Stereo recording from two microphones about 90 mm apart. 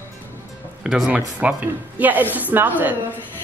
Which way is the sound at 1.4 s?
15° right (ahead or behind).